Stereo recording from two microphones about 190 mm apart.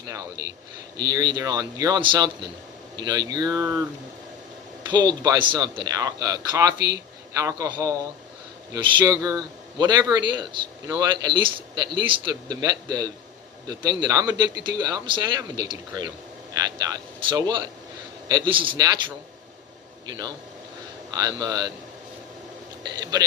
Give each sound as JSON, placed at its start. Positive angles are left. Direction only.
{"t": 0.9, "sound": "speech", "side_deg": -20}
{"t": 21.1, "sound": "speech", "side_deg": -20}
{"t": 22.8, "sound": "speech", "side_deg": -20}